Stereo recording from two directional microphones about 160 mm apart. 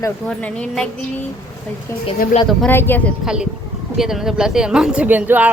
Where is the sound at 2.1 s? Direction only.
60° left (ahead or behind).